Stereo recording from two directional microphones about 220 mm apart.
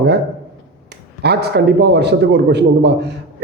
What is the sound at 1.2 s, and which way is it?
A man's voice, 50° right (ahead or behind).